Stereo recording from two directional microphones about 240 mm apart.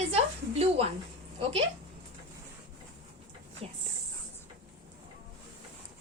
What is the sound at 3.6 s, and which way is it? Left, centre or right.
Speech, right.